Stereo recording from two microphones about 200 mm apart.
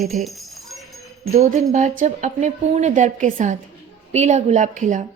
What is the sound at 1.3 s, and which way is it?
A woman's voice, 35° right (ahead or behind).